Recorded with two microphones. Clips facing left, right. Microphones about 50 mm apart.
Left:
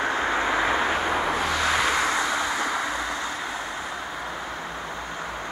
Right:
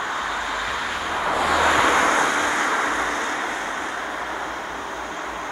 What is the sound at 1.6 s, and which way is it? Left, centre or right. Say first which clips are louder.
Vehicle: right 6 dB; centre.